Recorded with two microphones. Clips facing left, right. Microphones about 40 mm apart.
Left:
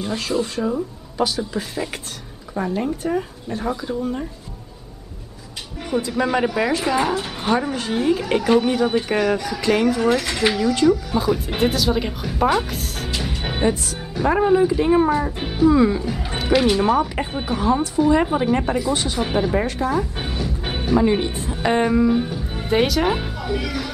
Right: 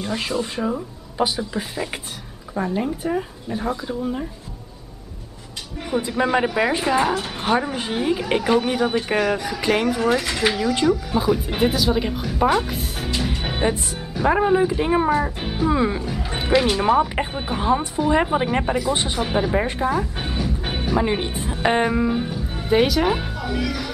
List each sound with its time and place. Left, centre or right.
0.4 s a woman's voice: centre
5.8 s music: centre
6.0 s a woman's voice: centre
7.0 s a woman's voice: centre
13.7 s speech: centre
14.2 s a woman's voice: centre
15.6 s speech: centre
16.5 s a woman's voice: centre
19.6 s speech: right
19.9 s speech: centre
21.0 s a woman's voice: centre
22.2 s speech: centre